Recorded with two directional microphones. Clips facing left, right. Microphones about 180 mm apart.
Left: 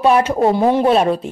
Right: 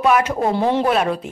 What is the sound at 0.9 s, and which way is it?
Speech, 30° left (ahead or behind).